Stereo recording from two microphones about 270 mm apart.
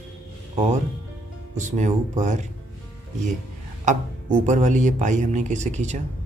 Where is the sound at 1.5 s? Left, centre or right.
Right.